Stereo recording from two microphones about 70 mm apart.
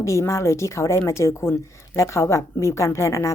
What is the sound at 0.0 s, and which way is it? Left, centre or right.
Speech, left.